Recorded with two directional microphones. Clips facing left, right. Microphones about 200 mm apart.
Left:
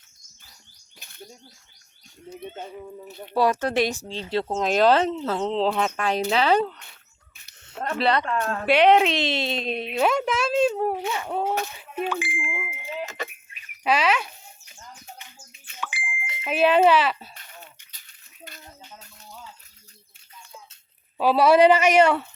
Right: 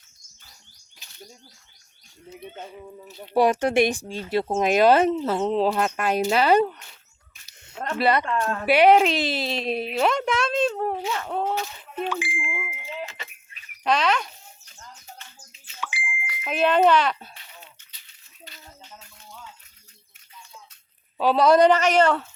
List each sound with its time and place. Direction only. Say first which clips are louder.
0.9 s bird: left 3 dB; 55° left (ahead or behind)
3.1 s speech: left 2 dB; 55° left (ahead or behind)
3.3 s speech: right 3 dB; 15° right (ahead or behind)
7.9 s a woman's voice: right 1 dB; 5° right (ahead or behind); by 12.0 s 10° left (ahead or behind)
12.0 s speech: even; 55° left (ahead or behind)
12.4 s bicycle bell: even; centre (ahead or behind)
13.1 s a sound: left 8 dB; 45° left (ahead or behind)
13.5 s a sound: even; 5° left (ahead or behind)
15.5 s smoke detector: even; 55° left (ahead or behind)
16.4 s speech: left 1 dB; 5° left (ahead or behind)
17.3 s a sound: left 2 dB; 50° left (ahead or behind)
21.2 s a woman's voice: even; 10° left (ahead or behind)